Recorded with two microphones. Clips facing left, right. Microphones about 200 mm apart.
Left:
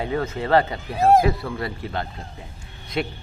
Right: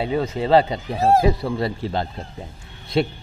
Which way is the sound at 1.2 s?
25° right (ahead or behind).